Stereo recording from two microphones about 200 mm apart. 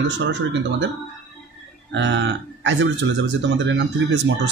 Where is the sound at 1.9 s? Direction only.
65° right (ahead or behind).